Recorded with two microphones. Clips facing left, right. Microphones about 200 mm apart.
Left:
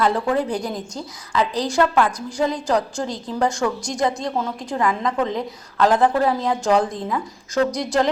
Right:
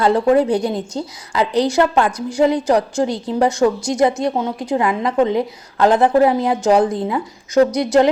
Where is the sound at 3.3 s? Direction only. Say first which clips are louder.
Right 5 dB; 20° right (ahead or behind).